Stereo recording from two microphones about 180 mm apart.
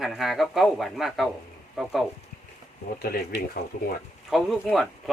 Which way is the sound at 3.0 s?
55° left (ahead or behind).